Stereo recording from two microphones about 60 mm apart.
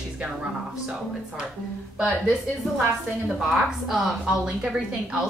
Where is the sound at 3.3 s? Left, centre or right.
Centre.